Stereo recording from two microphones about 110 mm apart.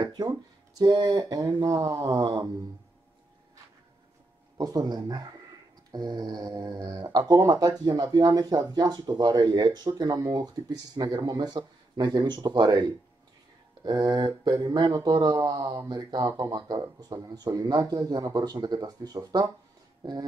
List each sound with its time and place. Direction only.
0.0 s speech: 35° right (ahead or behind)
4.6 s speech: 35° right (ahead or behind)